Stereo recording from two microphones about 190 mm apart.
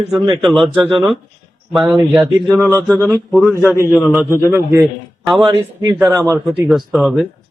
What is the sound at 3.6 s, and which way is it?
Speech, 15° left (ahead or behind).